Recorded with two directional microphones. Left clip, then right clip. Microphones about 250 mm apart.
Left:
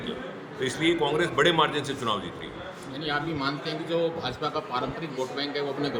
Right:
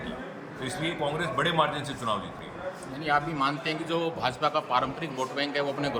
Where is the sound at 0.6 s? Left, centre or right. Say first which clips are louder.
Left 5 dB; centre.